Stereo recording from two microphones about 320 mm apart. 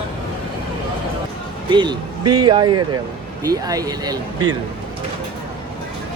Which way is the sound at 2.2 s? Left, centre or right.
Right.